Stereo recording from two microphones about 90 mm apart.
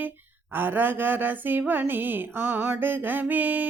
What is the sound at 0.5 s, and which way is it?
Mantra, 20° right (ahead or behind).